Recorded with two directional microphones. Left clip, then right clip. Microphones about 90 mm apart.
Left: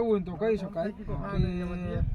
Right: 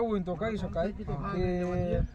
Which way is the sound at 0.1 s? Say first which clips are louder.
Left 5 dB; 45° right (ahead or behind).